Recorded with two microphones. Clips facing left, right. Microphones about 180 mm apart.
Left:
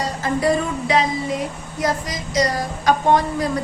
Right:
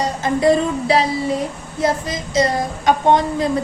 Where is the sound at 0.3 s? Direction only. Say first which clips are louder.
Right 5 dB; 30° right (ahead or behind).